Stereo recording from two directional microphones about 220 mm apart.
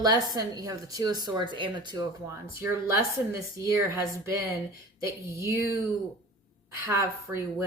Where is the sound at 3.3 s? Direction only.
15° right (ahead or behind).